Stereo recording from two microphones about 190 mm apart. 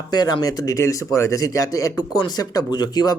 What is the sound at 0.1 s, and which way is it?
Speech, 20° left (ahead or behind).